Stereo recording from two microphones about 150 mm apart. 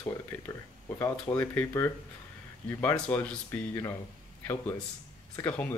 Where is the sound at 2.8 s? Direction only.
10° left (ahead or behind).